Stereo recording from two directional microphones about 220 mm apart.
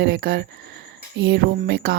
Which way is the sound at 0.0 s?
45° right (ahead or behind).